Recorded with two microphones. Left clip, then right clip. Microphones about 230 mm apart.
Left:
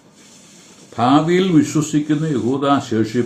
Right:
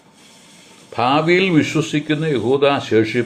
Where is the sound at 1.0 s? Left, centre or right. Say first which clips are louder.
Even; right.